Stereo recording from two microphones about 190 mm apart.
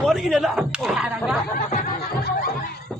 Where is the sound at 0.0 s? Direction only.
Centre (ahead or behind).